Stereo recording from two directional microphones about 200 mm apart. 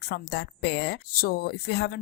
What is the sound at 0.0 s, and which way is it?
Speech, 55° left (ahead or behind).